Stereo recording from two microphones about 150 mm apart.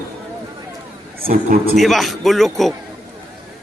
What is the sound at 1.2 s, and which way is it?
Speech, 70° right (ahead or behind).